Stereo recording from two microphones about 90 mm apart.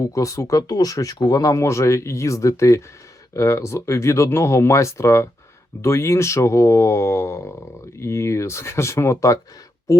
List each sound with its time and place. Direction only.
0.0 s speech: 40° left (ahead or behind)